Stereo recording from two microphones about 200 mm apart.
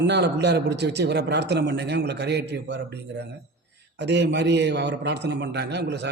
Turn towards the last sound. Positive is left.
turn(degrees=-60)  # may be behind; listen again after turning